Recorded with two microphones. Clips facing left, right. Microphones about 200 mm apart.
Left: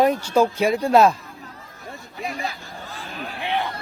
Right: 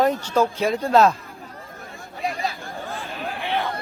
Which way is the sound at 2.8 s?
50° right (ahead or behind).